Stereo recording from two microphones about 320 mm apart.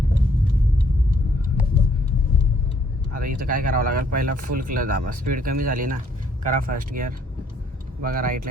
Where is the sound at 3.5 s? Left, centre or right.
Right.